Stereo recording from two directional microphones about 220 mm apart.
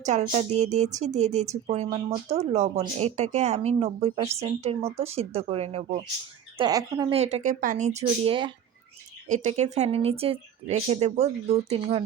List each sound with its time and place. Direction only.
0.0 s speech: 35° right (ahead or behind)
6.6 s speech: 15° right (ahead or behind)
7.2 s speech: 30° right (ahead or behind)